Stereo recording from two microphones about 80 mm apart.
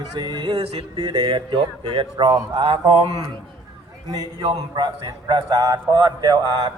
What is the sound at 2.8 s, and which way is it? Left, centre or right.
A man's voice, right.